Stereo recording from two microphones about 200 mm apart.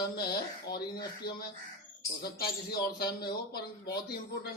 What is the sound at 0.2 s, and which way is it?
Speech, 50° left (ahead or behind).